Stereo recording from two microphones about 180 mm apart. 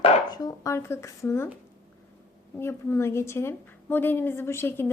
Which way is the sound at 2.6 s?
15° left (ahead or behind).